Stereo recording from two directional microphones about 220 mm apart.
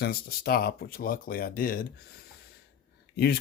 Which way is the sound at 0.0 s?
45° left (ahead or behind).